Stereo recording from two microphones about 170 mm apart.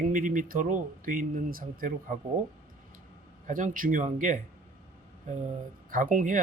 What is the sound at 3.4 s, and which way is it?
Speech, 50° right (ahead or behind).